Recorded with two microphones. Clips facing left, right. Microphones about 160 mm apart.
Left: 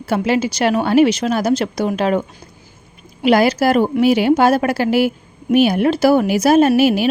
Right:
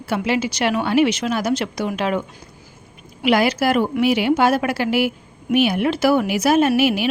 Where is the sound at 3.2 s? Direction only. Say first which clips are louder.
Left 4 dB; 40° left (ahead or behind).